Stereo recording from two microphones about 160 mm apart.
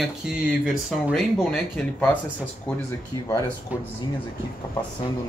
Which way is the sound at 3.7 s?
10° right (ahead or behind).